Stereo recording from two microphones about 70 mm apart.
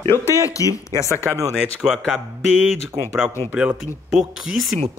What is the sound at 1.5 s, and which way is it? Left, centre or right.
Speech, centre.